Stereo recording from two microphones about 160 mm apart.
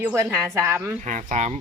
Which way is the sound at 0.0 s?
15° right (ahead or behind).